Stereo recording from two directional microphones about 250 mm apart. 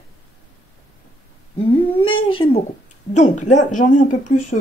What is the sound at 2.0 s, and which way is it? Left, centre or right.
Speech, centre.